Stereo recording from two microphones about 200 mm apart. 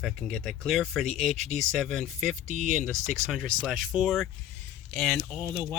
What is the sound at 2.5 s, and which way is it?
Speech, 35° right (ahead or behind).